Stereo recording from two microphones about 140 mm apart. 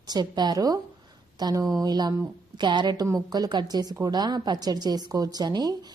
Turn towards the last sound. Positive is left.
turn(degrees=-30)  # may be behind; listen again after turning